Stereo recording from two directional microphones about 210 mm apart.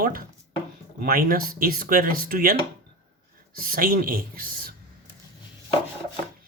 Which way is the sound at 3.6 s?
45° right (ahead or behind).